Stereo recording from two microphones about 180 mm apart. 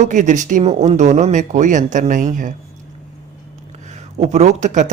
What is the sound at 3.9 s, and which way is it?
A man's voice, 40° right (ahead or behind).